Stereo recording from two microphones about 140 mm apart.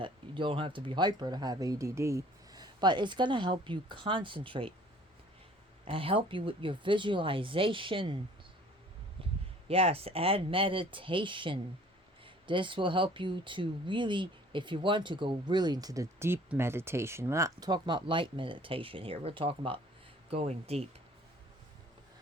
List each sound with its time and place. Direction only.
0.0 s speech: 35° right (ahead or behind)
5.8 s speech: 40° right (ahead or behind)
9.6 s speech: 45° right (ahead or behind)